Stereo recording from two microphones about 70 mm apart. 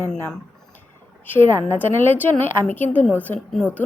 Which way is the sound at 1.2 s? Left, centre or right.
Left.